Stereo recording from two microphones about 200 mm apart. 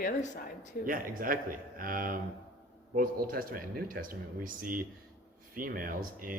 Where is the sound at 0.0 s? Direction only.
40° left (ahead or behind).